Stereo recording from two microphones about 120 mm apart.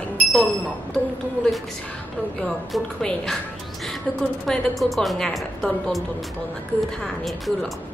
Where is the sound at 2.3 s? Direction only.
5° left (ahead or behind).